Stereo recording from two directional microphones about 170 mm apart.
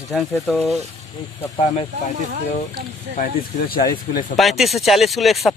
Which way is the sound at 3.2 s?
55° left (ahead or behind).